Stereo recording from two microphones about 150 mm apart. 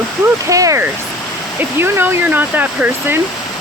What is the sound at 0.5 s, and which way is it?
Speech, 20° right (ahead or behind).